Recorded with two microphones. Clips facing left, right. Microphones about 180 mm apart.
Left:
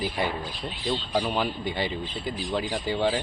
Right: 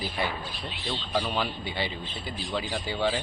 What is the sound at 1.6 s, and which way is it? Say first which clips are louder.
Speech: left 3 dB; 45° left (ahead or behind).